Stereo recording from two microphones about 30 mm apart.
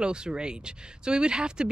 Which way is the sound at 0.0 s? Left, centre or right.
Right.